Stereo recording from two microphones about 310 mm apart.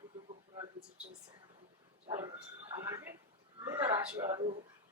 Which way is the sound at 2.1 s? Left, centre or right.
Centre.